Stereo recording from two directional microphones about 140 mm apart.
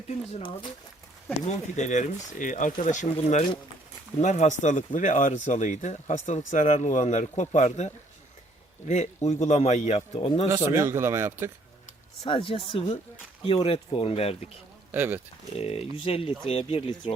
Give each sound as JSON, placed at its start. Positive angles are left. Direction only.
{"t": 0.1, "sound": "a man's voice", "side_deg": 50}
{"t": 10.8, "sound": "speech", "side_deg": -20}
{"t": 12.2, "sound": "a man's voice", "side_deg": 40}
{"t": 14.9, "sound": "speech", "side_deg": -15}
{"t": 15.5, "sound": "a man's voice", "side_deg": 45}